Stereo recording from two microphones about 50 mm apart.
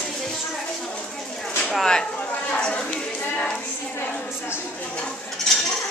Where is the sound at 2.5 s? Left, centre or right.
Left.